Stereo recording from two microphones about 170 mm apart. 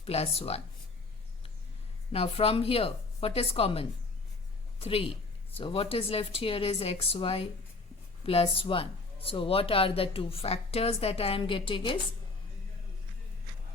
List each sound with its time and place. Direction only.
0.0 s speech: 35° left (ahead or behind)
2.1 s speech: 35° left (ahead or behind)
8.5 s speech: 35° left (ahead or behind)